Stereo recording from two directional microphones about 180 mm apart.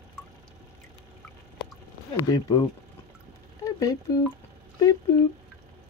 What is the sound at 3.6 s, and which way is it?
Speech, 20° left (ahead or behind).